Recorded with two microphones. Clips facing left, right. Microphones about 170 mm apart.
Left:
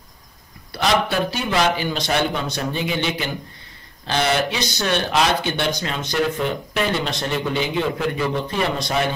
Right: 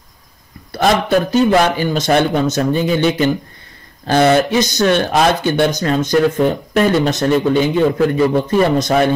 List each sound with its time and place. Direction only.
0.7 s speech: 45° right (ahead or behind)